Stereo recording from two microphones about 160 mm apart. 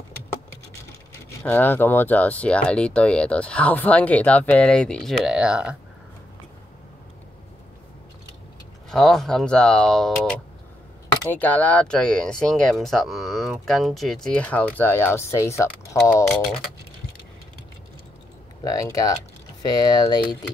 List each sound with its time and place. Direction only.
1.4 s speech: 10° left (ahead or behind); by 5.8 s 5° right (ahead or behind)
8.9 s speech: centre (ahead or behind)
11.3 s speech: 10° left (ahead or behind)
18.6 s speech: 20° left (ahead or behind)